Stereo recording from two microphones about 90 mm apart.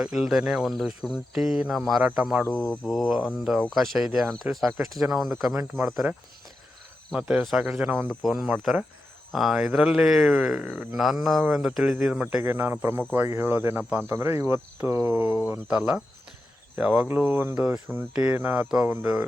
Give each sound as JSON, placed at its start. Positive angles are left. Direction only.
{"t": 0.0, "sound": "speech", "side_deg": -5}
{"t": 2.4, "sound": "speech", "side_deg": 10}
{"t": 2.9, "sound": "speech", "side_deg": 0}
{"t": 5.5, "sound": "speech", "side_deg": -20}
{"t": 7.1, "sound": "speech", "side_deg": -10}
{"t": 7.9, "sound": "speech", "side_deg": -20}
{"t": 8.2, "sound": "speech", "side_deg": -5}
{"t": 12.4, "sound": "speech", "side_deg": -25}
{"t": 17.9, "sound": "speech", "side_deg": -15}